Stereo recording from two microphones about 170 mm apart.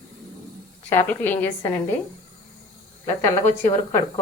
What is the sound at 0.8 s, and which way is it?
Speech, 10° left (ahead or behind).